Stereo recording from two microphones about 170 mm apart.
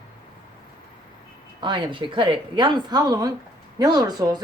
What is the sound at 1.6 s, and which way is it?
Speech, 30° right (ahead or behind).